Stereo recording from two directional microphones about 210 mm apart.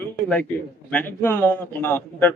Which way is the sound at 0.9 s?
10° left (ahead or behind).